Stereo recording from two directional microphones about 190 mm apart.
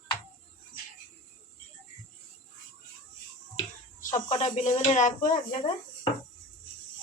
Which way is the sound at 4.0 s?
40° left (ahead or behind).